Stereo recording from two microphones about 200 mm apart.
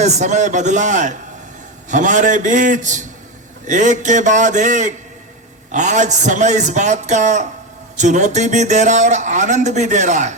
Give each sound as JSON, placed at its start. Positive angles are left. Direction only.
{"t": 0.0, "sound": "speech", "side_deg": -35}